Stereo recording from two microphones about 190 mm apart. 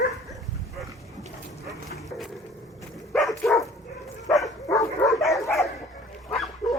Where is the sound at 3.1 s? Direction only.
Centre (ahead or behind).